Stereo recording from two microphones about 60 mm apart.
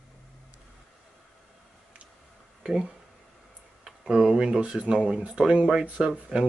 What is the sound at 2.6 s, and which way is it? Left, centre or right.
Speech, centre.